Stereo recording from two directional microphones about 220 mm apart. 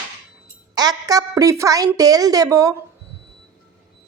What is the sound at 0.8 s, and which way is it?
A woman's voice, 15° right (ahead or behind).